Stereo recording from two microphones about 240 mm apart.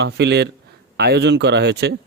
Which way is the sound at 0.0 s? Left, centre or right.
Right.